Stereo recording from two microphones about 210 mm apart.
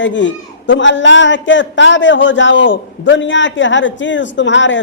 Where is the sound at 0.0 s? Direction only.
60° left (ahead or behind).